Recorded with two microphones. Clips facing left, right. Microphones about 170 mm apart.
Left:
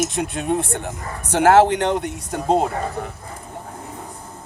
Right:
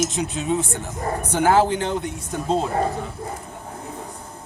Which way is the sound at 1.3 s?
70° left (ahead or behind).